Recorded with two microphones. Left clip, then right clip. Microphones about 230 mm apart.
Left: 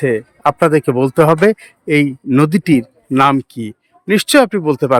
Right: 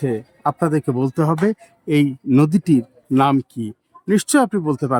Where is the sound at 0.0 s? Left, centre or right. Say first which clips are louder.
Left 7 dB; centre.